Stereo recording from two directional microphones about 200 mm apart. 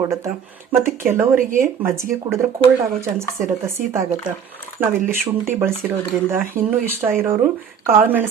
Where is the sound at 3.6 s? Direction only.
15° right (ahead or behind).